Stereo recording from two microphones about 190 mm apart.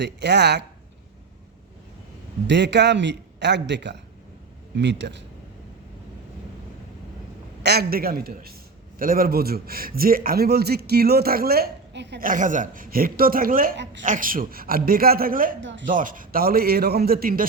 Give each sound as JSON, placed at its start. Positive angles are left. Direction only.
{"t": 0.0, "sound": "a man's voice", "side_deg": -65}
{"t": 2.5, "sound": "a man's voice", "side_deg": -65}
{"t": 7.6, "sound": "speech", "side_deg": -60}
{"t": 12.3, "sound": "speech", "side_deg": -45}
{"t": 15.6, "sound": "speech", "side_deg": -75}
{"t": 15.9, "sound": "speech", "side_deg": -45}